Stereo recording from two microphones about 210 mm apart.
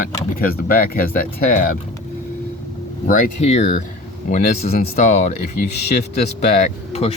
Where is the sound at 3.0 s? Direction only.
30° left (ahead or behind).